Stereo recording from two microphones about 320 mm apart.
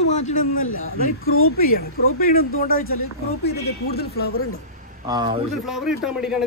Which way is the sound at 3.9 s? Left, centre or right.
Left.